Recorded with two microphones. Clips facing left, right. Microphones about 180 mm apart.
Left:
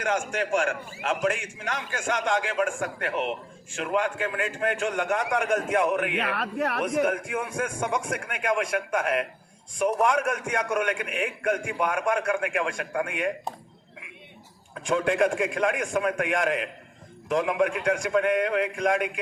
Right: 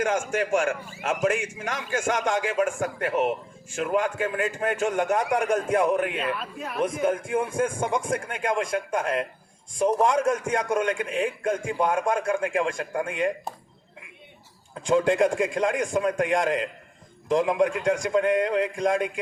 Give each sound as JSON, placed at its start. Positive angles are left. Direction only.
{"t": 0.0, "sound": "a man's voice", "side_deg": -45}
{"t": 6.1, "sound": "speech", "side_deg": 75}
{"t": 7.0, "sound": "a man's voice", "side_deg": -25}
{"t": 14.8, "sound": "a man's voice", "side_deg": -25}